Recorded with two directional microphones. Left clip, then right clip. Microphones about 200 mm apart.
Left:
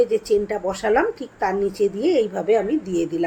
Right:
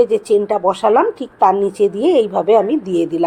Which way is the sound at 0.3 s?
10° right (ahead or behind).